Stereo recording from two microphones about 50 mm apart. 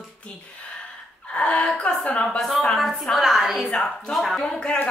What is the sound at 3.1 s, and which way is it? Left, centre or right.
Speech, centre.